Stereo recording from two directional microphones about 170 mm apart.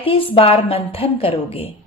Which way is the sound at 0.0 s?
30° left (ahead or behind).